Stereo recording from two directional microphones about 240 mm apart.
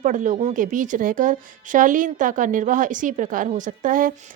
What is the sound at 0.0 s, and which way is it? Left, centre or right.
A woman's voice, right.